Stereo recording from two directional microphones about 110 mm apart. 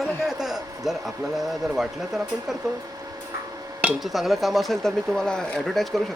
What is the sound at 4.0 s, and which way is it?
Speech, centre (ahead or behind).